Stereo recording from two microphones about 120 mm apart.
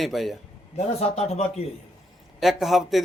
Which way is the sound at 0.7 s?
60° left (ahead or behind).